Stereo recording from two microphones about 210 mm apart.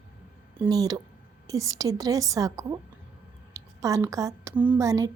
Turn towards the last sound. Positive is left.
turn(degrees=-15)  # may be behind; listen again after turning